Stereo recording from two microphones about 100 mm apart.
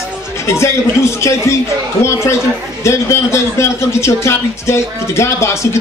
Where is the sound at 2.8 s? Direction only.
30° left (ahead or behind).